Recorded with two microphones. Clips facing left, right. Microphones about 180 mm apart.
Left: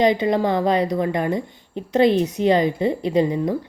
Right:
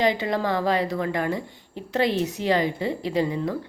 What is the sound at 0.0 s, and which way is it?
Speech, 20° left (ahead or behind).